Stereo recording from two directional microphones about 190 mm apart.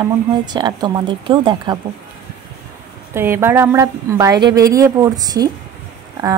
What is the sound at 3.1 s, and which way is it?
A woman's voice, 10° right (ahead or behind).